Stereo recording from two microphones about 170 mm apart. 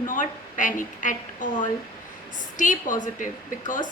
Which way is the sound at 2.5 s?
50° left (ahead or behind).